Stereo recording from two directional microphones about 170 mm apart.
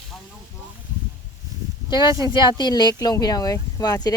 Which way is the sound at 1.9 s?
25° left (ahead or behind).